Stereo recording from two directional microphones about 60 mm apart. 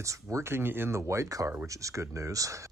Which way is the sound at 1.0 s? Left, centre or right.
Right.